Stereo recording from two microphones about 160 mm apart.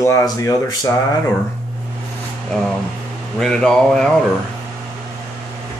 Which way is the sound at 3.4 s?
5° left (ahead or behind).